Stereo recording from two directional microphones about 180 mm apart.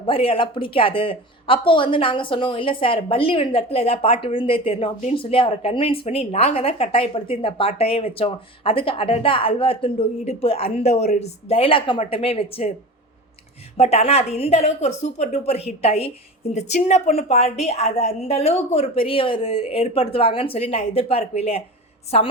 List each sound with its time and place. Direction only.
0.0 s speech: 30° left (ahead or behind)
13.7 s speech: 35° left (ahead or behind)